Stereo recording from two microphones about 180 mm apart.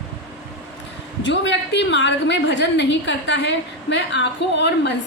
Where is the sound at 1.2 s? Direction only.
85° left; by 4.9 s 70° left (ahead or behind).